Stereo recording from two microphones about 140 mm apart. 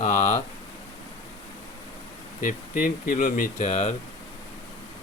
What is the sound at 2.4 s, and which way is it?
Speech, 75° left (ahead or behind).